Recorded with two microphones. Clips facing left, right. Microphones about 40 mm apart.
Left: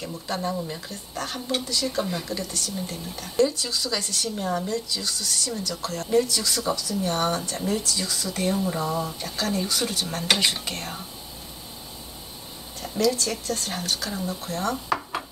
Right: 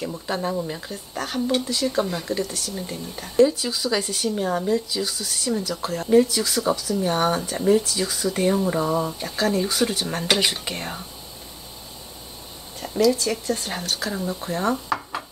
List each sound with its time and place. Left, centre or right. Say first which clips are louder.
0.3 s speech: right 2 dB; centre
10.2 s dishes: right 1 dB; centre
10.6 s speech: right 2 dB; centre
13.1 s speech: right 4 dB; centre
14.9 s a sound: even; centre